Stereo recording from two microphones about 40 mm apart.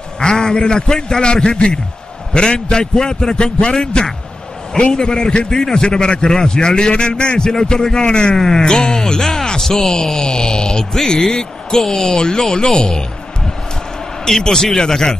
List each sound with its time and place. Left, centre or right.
0.2 s a man's voice: centre
14.2 s speech: centre